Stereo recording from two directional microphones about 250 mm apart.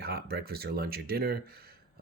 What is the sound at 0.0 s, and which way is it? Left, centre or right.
Speech, right.